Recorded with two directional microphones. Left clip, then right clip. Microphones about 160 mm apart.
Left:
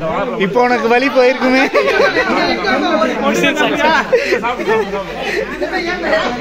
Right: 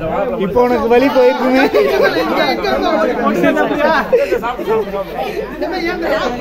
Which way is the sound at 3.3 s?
30° right (ahead or behind).